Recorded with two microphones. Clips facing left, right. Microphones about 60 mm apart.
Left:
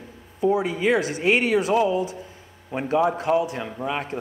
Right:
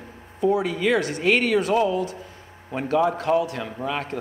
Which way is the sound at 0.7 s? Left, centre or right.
Centre.